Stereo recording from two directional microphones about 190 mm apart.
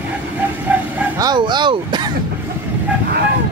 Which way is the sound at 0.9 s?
20° right (ahead or behind).